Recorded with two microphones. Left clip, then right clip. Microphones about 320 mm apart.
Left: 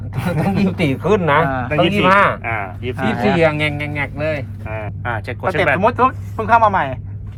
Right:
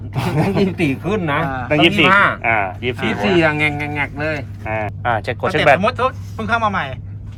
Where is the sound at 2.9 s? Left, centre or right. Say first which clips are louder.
Left 1 dB; left.